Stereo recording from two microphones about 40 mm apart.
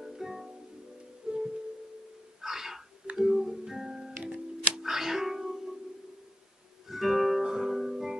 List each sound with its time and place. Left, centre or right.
0.0 s music: centre
2.4 s a sound: centre
3.2 s music: centre
4.8 s music: centre
6.9 s music: centre